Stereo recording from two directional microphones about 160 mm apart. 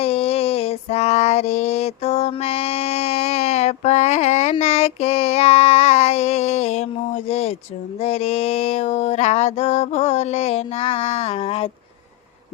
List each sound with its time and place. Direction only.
0.0 s female singing: 40° left (ahead or behind)